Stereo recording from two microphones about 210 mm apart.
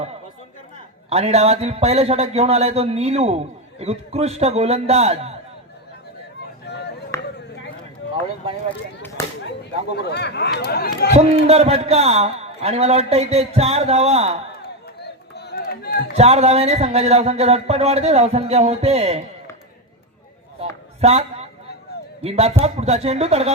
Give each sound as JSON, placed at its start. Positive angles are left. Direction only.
{"t": 1.1, "sound": "speech", "side_deg": -30}
{"t": 6.7, "sound": "chop", "side_deg": 50}
{"t": 7.1, "sound": "a sound", "side_deg": 15}
{"t": 9.0, "sound": "a sound", "side_deg": 10}
{"t": 10.0, "sound": "speech", "side_deg": 55}
{"t": 11.1, "sound": "speech", "side_deg": -30}
{"t": 15.4, "sound": "run", "side_deg": 50}
{"t": 16.1, "sound": "speech", "side_deg": -30}
{"t": 20.6, "sound": "a sound", "side_deg": -30}
{"t": 22.2, "sound": "speech", "side_deg": -30}